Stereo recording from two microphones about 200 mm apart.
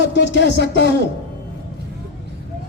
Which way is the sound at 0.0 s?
60° left (ahead or behind).